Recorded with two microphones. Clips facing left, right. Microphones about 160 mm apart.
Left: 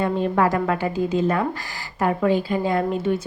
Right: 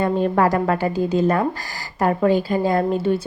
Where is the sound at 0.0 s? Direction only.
45° right (ahead or behind).